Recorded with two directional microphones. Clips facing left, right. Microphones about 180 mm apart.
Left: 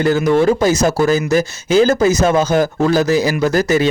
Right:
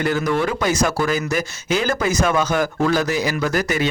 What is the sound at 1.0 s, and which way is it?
Speech, 40° left (ahead or behind).